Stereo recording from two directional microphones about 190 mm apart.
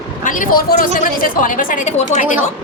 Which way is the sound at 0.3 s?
45° left (ahead or behind).